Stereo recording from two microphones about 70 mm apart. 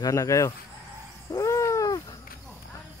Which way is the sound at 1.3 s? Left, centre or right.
Left.